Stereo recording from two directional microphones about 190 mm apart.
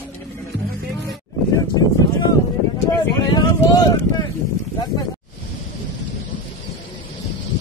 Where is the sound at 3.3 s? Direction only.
20° left (ahead or behind).